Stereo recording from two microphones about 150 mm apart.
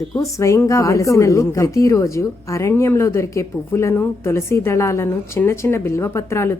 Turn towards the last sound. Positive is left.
turn(degrees=20)  # may be behind; listen again after turning